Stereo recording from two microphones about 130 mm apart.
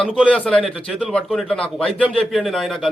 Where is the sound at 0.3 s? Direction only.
10° left (ahead or behind).